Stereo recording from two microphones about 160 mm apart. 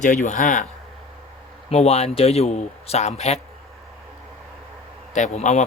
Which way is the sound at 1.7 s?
40° left (ahead or behind).